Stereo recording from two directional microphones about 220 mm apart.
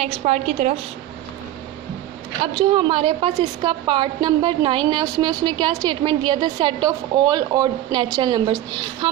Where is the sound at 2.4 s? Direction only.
25° right (ahead or behind).